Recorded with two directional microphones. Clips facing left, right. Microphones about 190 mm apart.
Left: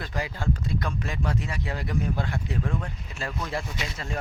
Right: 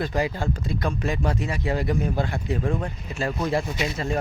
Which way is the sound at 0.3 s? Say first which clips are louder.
Right 1 dB; 35° right (ahead or behind).